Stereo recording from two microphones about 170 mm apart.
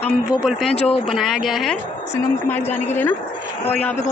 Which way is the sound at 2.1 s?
10° left (ahead or behind).